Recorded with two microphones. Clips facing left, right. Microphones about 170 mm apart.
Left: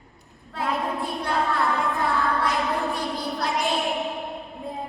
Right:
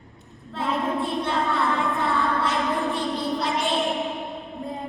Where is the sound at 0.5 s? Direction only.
Centre (ahead or behind).